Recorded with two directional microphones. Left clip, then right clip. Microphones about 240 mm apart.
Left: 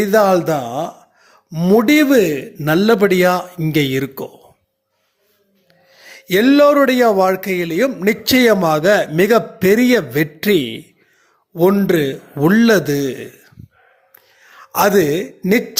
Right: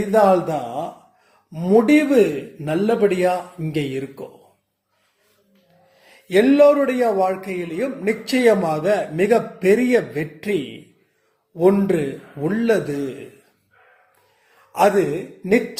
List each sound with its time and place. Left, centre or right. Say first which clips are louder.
0.1 s speech: left 1 dB; left
6.0 s speech: left 2 dB; left
14.7 s speech: left 3 dB; left